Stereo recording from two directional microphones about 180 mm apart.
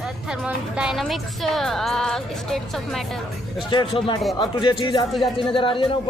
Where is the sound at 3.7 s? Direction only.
30° left (ahead or behind).